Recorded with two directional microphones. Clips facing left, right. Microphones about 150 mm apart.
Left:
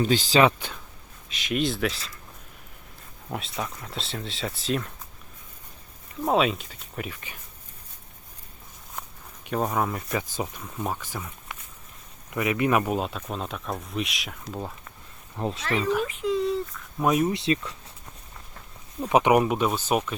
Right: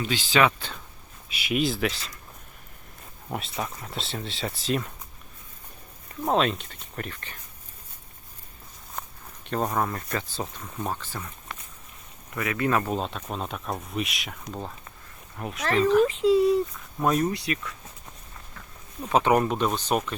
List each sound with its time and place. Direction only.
0.0 s speech: 40° left (ahead or behind)
1.3 s speech: 5° right (ahead or behind)
3.2 s speech: centre (ahead or behind)
6.2 s speech: 5° left (ahead or behind)
9.0 s speech: 5° left (ahead or behind)
15.4 s speech: 30° left (ahead or behind)
15.7 s speech: 10° left (ahead or behind)
16.0 s a sound: 25° right (ahead or behind)
17.0 s speech: 5° left (ahead or behind)
17.3 s speech: 25° left (ahead or behind)
19.0 s speech: 15° left (ahead or behind)